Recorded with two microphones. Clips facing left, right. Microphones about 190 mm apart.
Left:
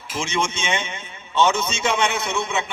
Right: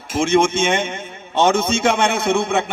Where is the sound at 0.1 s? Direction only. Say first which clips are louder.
Right 9 dB; 55° right (ahead or behind).